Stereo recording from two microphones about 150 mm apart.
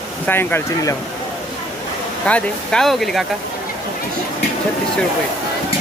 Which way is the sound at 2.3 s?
5° left (ahead or behind).